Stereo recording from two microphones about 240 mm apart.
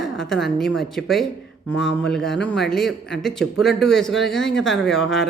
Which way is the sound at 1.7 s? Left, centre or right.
Left.